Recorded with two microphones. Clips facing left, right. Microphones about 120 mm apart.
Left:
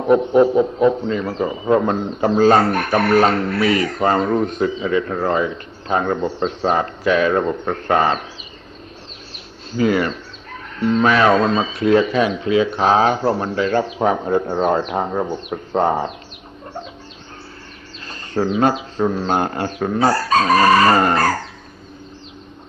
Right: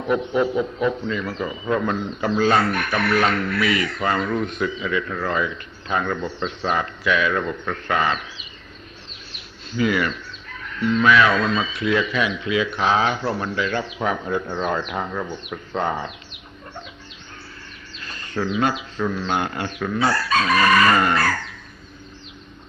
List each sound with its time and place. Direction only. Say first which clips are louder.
0.0 s a man's voice: left 7 dB; 40° left (ahead or behind)
9.3 s a man's voice: left 3 dB; 40° left (ahead or behind)
18.0 s a man's voice: left 5 dB; 35° left (ahead or behind)